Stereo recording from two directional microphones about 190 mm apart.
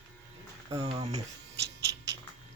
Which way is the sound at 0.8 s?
35° right (ahead or behind).